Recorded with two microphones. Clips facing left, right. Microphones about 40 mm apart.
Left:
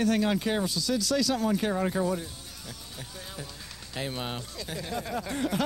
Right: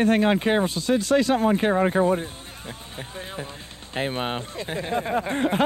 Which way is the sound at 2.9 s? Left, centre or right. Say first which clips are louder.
Right 8 dB; right.